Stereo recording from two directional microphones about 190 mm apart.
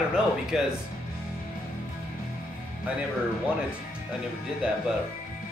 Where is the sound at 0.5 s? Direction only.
5° right (ahead or behind).